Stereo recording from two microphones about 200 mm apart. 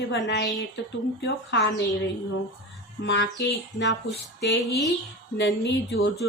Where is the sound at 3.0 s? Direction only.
60° left (ahead or behind).